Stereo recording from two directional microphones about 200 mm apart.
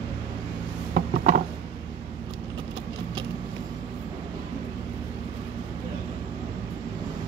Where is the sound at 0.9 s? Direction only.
45° right (ahead or behind).